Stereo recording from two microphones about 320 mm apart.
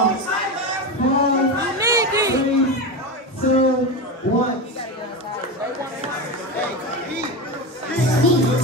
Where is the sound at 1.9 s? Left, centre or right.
Centre.